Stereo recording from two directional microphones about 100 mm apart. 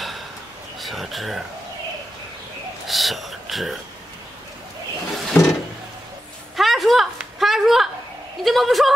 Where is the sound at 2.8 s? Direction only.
Centre (ahead or behind).